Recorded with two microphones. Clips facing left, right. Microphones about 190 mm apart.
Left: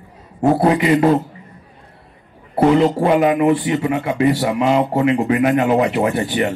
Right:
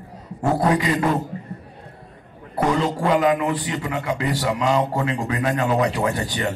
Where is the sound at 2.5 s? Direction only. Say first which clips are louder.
Left 8 dB; 25° left (ahead or behind).